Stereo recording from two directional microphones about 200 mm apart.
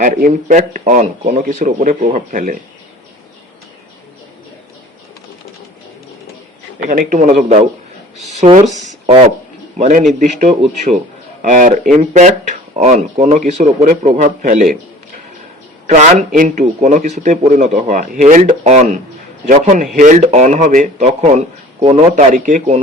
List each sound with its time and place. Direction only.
0.0 s speech: 40° right (ahead or behind)
6.8 s speech: 45° right (ahead or behind)
15.9 s speech: 35° right (ahead or behind)